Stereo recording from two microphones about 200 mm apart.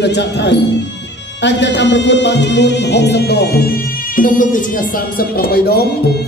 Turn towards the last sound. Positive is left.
turn(degrees=50)  # may be behind; listen again after turning